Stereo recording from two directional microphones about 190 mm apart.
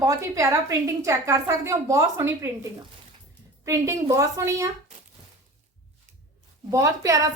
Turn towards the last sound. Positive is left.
turn(degrees=-15)  # may be behind; listen again after turning